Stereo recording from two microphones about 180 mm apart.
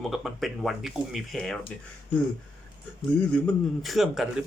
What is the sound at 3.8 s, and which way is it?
Speech, centre (ahead or behind).